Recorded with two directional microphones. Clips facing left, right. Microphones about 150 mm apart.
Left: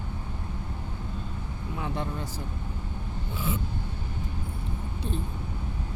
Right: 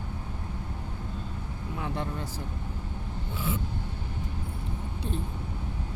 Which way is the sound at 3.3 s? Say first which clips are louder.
Left 1 dB; 15° left (ahead or behind).